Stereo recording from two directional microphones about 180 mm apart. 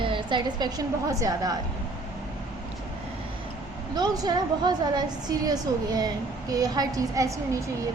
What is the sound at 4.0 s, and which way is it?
A woman's voice, 20° right (ahead or behind).